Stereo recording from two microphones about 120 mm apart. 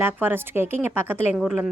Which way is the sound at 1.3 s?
5° right (ahead or behind).